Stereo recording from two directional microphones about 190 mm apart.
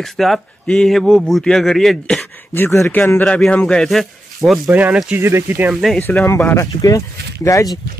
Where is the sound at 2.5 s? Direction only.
15° left (ahead or behind).